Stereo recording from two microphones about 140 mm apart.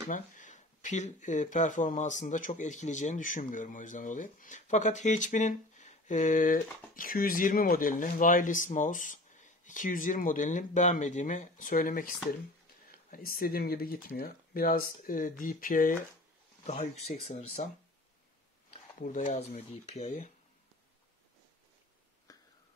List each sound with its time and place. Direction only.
0.1 s speech: 65° left (ahead or behind)
16.6 s speech: 50° left (ahead or behind)
18.9 s speech: 65° left (ahead or behind)
22.3 s a sound: 25° left (ahead or behind)